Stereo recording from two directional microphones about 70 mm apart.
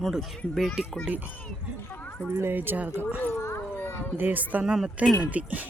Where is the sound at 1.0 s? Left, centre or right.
Right.